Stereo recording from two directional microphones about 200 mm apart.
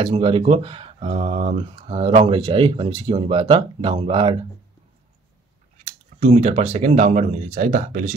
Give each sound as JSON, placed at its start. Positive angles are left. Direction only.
{"t": 0.0, "sound": "speech", "side_deg": -25}
{"t": 6.1, "sound": "speech", "side_deg": -35}